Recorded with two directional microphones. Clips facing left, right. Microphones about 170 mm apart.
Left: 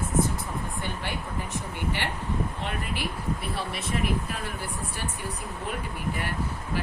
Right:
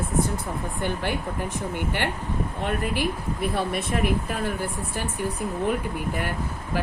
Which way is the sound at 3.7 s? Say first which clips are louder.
Right 4 dB; 50° right (ahead or behind).